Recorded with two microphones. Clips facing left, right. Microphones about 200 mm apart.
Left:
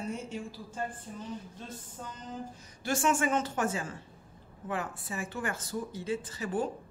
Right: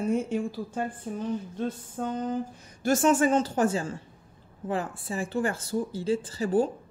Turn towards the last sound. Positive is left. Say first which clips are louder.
# right 8 dB
turn(degrees=-30)  # may be behind; listen again after turning